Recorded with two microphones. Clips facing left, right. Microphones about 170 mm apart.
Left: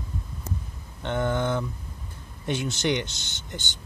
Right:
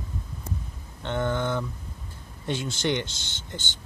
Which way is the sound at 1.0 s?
15° left (ahead or behind).